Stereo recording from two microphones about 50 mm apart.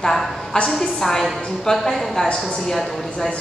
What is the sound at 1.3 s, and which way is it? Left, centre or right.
A woman's voice, centre.